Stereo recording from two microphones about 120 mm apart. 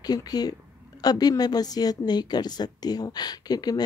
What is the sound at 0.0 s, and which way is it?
A woman's voice, 35° left (ahead or behind).